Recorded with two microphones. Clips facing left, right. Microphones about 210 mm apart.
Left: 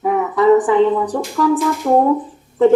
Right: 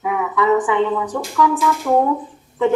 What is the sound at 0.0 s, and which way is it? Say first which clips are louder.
A woman's voice: left 5 dB; 40° left (ahead or behind).